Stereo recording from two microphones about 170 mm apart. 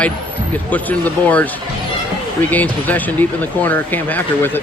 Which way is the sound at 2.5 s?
10° left (ahead or behind).